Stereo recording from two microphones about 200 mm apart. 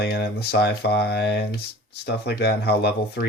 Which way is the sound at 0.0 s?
50° left (ahead or behind).